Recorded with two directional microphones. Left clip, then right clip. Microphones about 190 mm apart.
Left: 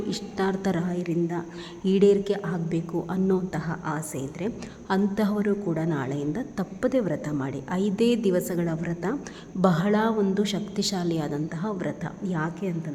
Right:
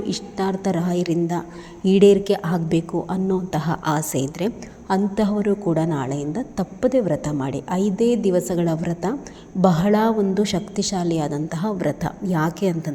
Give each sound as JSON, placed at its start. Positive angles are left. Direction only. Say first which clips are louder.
{"t": 0.1, "sound": "a woman's voice", "louder": "right 3 dB", "side_deg": -10}
{"t": 0.9, "sound": "a woman's voice", "louder": "right 6 dB", "side_deg": -20}
{"t": 2.9, "sound": "a woman's voice", "louder": "right 3 dB", "side_deg": -10}
{"t": 3.6, "sound": "a woman's voice", "louder": "right 8 dB", "side_deg": -25}
{"t": 4.9, "sound": "a woman's voice", "louder": "right 5 dB", "side_deg": -10}